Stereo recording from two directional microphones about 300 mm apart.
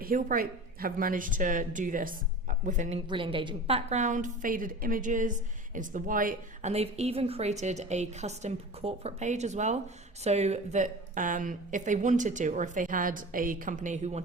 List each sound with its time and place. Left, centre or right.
0.0 s a woman's voice: right